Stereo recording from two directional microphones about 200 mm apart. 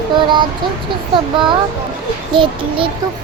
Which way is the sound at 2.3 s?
25° right (ahead or behind).